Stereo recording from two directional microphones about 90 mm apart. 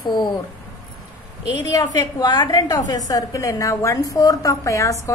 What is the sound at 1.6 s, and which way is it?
A woman's voice, 45° left (ahead or behind).